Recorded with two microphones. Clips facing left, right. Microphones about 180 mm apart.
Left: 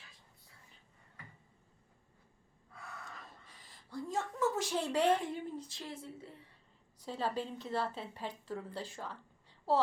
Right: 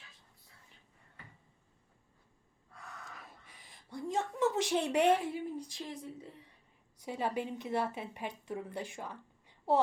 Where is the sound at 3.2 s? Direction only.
10° right (ahead or behind).